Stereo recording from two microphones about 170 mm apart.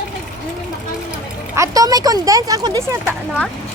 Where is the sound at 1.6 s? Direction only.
20° right (ahead or behind).